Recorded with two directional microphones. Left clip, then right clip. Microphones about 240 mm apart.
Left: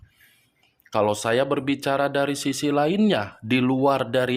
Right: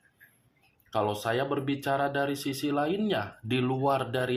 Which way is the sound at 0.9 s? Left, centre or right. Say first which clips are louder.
Left 7 dB; left.